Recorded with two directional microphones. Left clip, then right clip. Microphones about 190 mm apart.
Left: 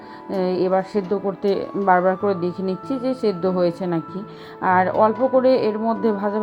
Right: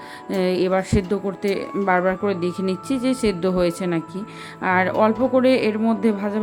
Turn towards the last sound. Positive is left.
turn(degrees=-15)  # may be behind; listen again after turning